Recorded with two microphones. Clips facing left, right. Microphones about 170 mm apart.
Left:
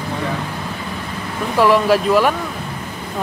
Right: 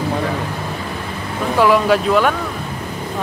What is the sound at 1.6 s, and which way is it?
Speech, centre (ahead or behind).